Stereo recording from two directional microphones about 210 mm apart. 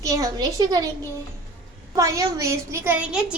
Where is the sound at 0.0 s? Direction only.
15° right (ahead or behind).